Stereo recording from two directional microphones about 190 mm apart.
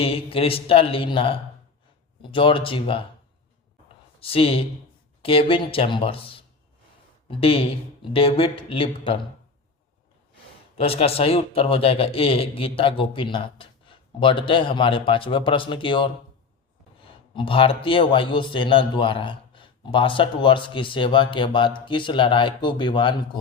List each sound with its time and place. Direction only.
0.0 s a man's voice: 30° left (ahead or behind)
4.2 s a man's voice: 30° left (ahead or behind)
10.8 s a man's voice: 30° left (ahead or behind)
17.3 s a man's voice: 25° left (ahead or behind)